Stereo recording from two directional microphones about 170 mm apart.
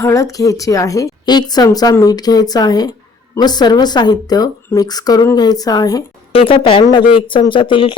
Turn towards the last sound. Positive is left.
turn(degrees=30)  # may be behind; listen again after turning